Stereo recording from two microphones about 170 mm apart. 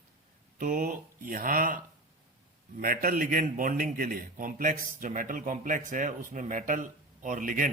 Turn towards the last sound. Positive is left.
turn(degrees=-50)  # may be behind; listen again after turning